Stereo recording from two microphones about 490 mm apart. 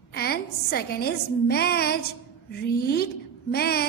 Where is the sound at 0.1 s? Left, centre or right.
Centre.